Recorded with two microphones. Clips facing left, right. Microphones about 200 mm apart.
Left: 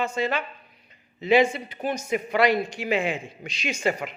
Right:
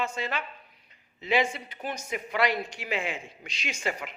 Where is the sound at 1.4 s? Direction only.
35° left (ahead or behind).